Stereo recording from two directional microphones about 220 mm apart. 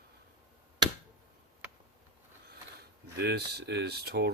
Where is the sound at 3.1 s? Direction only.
50° right (ahead or behind).